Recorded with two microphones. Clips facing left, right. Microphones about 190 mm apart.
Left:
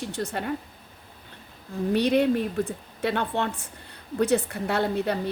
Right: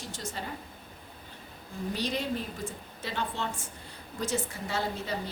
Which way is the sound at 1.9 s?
60° left (ahead or behind).